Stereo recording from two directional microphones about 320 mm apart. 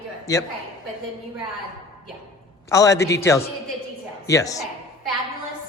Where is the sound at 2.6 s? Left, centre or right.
Centre.